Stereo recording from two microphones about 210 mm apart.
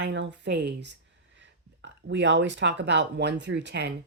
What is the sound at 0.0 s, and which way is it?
Speech, 60° right (ahead or behind).